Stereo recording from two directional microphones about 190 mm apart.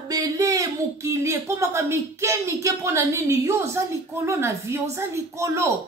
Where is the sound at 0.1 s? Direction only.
20° right (ahead or behind).